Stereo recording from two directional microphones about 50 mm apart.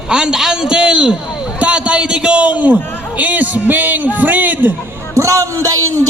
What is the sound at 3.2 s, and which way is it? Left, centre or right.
Music, right.